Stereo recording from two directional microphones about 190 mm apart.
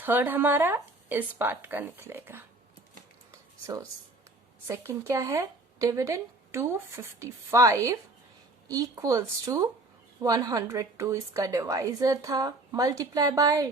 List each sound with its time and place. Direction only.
0.0 s speech: 10° right (ahead or behind)
3.3 s a sound: 20° right (ahead or behind)
4.7 s a woman's voice: 15° right (ahead or behind)